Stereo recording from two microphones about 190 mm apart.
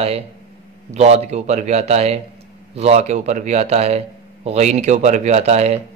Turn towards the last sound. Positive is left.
turn(degrees=-35)  # may be behind; listen again after turning